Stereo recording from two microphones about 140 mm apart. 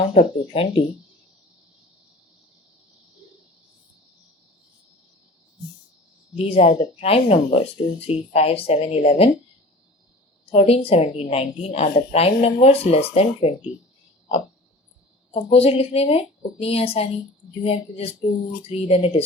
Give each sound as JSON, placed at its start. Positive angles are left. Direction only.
{"t": 0.1, "sound": "a woman's voice", "side_deg": 45}
{"t": 6.3, "sound": "a woman's voice", "side_deg": 45}
{"t": 10.5, "sound": "a woman's voice", "side_deg": 45}
{"t": 15.3, "sound": "a woman's voice", "side_deg": 45}